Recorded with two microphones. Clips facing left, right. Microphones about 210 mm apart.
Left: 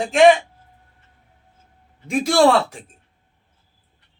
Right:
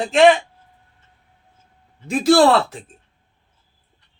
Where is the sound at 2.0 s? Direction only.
Centre (ahead or behind).